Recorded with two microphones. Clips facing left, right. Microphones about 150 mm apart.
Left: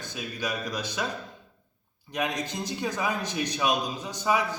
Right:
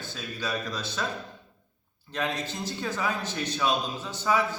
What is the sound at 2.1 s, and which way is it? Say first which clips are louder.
A man's voice: left 1 dB; 15° left (ahead or behind).